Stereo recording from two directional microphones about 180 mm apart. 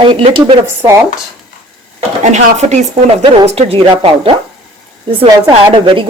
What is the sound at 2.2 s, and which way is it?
A woman's voice, 40° right (ahead or behind).